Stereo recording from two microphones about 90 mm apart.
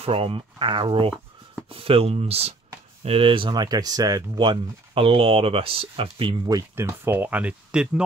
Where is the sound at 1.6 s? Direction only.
90° right.